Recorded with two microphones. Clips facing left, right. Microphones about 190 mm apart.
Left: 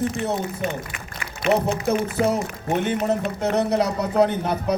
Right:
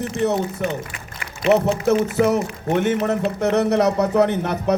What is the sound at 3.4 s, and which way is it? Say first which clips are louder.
A man's voice: right 4 dB; 70° right (ahead or behind).